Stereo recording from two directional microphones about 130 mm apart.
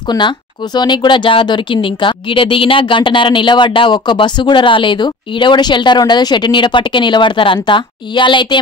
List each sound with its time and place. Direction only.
0.1 s speech: 25° left (ahead or behind)
0.7 s speech: 35° left (ahead or behind)